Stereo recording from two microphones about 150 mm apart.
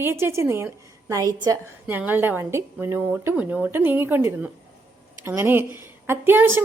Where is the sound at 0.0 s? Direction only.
15° right (ahead or behind).